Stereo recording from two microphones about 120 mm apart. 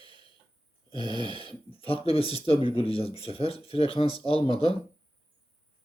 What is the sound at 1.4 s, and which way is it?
Speech, 50° left (ahead or behind).